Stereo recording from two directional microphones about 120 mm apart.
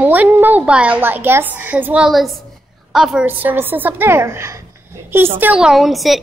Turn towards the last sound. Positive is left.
turn(degrees=0)  # may be behind; listen again after turning